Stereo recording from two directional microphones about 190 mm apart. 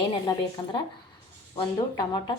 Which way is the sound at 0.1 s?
25° left (ahead or behind).